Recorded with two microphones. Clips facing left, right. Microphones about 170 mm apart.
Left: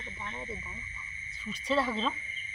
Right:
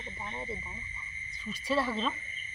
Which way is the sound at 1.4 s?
10° right (ahead or behind).